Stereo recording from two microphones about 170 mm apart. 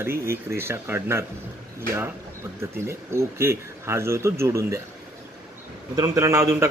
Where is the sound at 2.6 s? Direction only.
15° right (ahead or behind).